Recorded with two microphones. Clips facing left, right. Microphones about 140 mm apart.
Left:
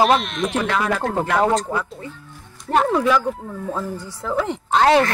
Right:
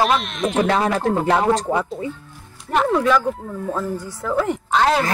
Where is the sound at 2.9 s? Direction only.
5° left (ahead or behind).